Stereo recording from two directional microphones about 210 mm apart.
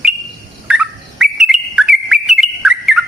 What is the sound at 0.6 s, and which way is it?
Bird, 5° right (ahead or behind).